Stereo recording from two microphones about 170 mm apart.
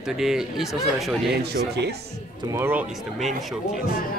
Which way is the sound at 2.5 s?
15° right (ahead or behind).